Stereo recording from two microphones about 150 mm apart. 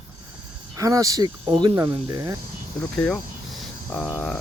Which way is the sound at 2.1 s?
25° right (ahead or behind).